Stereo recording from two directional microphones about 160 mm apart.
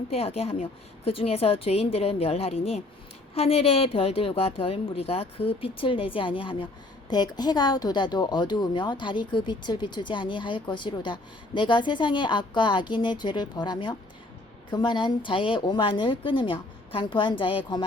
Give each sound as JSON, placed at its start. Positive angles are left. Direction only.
{"t": 0.1, "sound": "a woman's voice", "side_deg": 40}